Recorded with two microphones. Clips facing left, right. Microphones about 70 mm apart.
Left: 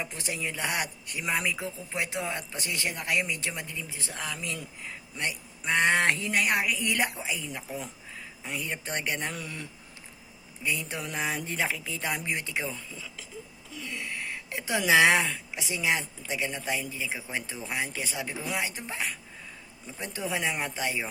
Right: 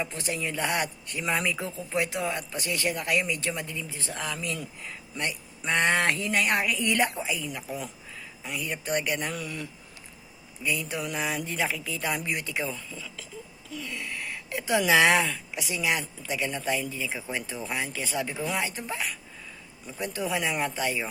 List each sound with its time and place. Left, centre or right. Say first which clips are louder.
0.0 s speech: right 3 dB; centre